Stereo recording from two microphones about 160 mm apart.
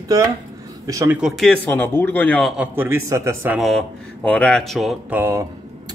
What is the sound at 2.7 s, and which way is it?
Speech, 15° right (ahead or behind).